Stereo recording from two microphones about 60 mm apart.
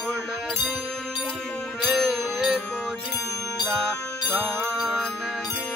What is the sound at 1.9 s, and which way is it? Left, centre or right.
Music, centre.